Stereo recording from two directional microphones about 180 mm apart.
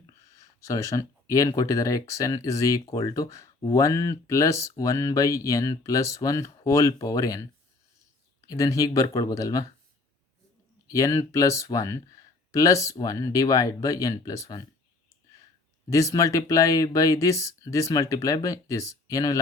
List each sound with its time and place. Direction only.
0.3 s speech: 15° left (ahead or behind)
8.4 s speech: 20° left (ahead or behind)
10.8 s speech: 15° left (ahead or behind)
15.9 s speech: 15° left (ahead or behind)